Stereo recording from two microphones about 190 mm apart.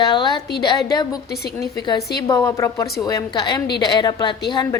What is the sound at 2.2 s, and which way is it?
A woman's voice, 15° left (ahead or behind).